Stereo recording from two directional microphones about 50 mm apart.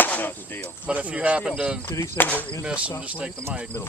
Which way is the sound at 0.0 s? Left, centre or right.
Left.